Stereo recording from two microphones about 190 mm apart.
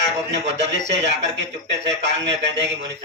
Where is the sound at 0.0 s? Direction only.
65° right (ahead or behind).